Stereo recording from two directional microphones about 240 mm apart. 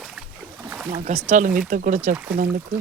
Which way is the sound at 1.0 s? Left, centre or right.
Right.